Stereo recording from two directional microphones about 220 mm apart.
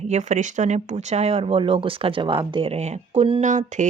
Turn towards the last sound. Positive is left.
turn(degrees=-35)  # may be behind; listen again after turning